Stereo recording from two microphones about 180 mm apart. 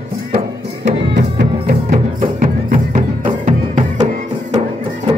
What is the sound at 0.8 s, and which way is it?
Music, 70° right (ahead or behind).